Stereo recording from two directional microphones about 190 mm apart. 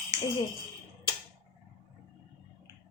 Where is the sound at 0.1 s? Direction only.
20° right (ahead or behind).